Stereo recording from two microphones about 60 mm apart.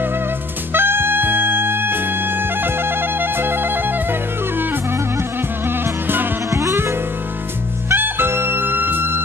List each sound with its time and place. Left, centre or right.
0.7 s music: right
6.5 s music: right
7.9 s music: right